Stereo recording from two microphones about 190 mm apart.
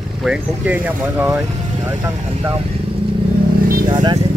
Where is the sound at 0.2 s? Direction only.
5° right (ahead or behind).